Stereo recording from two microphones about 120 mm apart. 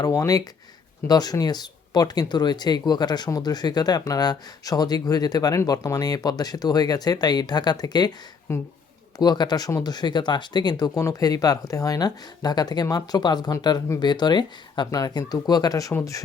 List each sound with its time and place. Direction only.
0.0 s speech: 30° left (ahead or behind)
8.5 s speech: 20° left (ahead or behind)
9.1 s speech: 35° left (ahead or behind)